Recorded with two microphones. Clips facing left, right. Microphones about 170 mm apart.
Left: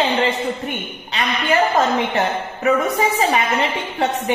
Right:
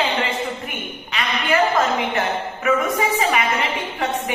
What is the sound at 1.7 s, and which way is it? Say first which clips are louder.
A woman's voice: left 2 dB; 35° left (ahead or behind).